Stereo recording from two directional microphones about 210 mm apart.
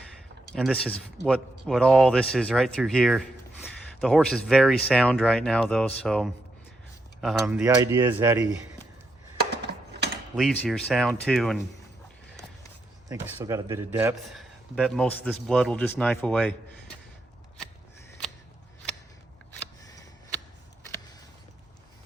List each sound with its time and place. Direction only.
0.5 s speech: 5° left (ahead or behind)
7.8 s speech: 15° right (ahead or behind)
9.5 s a sound: 50° right (ahead or behind)
10.3 s speech: centre (ahead or behind)
13.1 s speech: 15° right (ahead or behind); by 16.6 s 5° left (ahead or behind)
19.9 s a sound: 15° left (ahead or behind)